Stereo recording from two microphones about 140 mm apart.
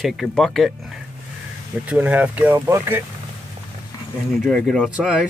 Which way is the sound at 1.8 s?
10° right (ahead or behind).